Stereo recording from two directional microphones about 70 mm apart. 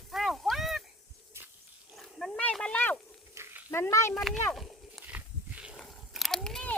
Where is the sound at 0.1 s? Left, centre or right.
Centre.